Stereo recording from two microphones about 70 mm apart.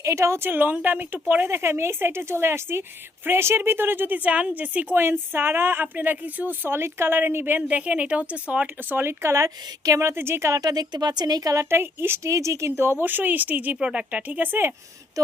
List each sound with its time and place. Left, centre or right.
0.0 s a woman's voice: right
10.5 s speech: right
11.7 s a woman's voice: right